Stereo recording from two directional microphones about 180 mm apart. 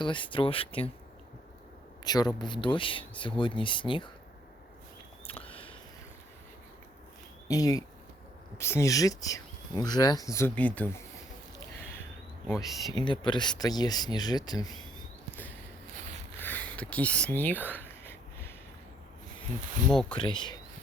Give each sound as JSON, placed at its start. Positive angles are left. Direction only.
{"t": 0.0, "sound": "speech", "side_deg": 25}
{"t": 2.0, "sound": "speech", "side_deg": 20}
{"t": 5.3, "sound": "a sound", "side_deg": 30}
{"t": 7.4, "sound": "speech", "side_deg": 20}
{"t": 10.3, "sound": "speech", "side_deg": 10}
{"t": 12.9, "sound": "speech", "side_deg": 25}
{"t": 16.4, "sound": "a sound", "side_deg": 10}
{"t": 19.9, "sound": "speech", "side_deg": 5}
{"t": 20.1, "sound": "speech", "side_deg": 25}